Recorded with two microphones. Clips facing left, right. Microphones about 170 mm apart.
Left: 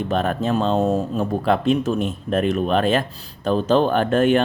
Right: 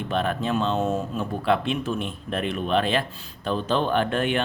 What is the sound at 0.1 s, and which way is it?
Speech, 40° left (ahead or behind).